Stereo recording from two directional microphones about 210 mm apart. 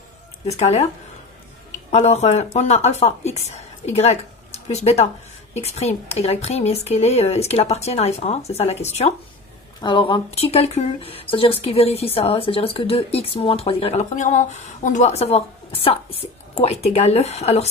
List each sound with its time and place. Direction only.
0.5 s speech: 30° left (ahead or behind)
1.9 s speech: 30° left (ahead or behind)